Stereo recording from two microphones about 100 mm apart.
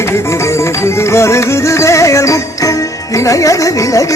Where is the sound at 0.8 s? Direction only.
30° left (ahead or behind).